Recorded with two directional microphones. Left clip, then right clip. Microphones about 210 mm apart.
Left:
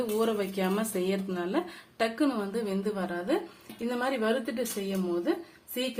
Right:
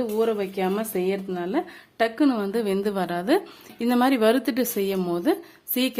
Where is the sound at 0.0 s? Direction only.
25° right (ahead or behind).